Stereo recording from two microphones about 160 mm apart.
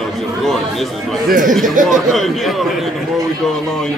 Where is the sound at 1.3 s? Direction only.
55° right (ahead or behind).